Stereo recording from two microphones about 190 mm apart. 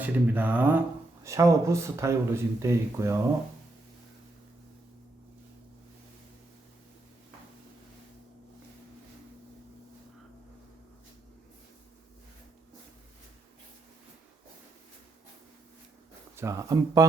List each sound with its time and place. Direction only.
0.0 s speech: 10° right (ahead or behind)
16.3 s speech: 15° right (ahead or behind)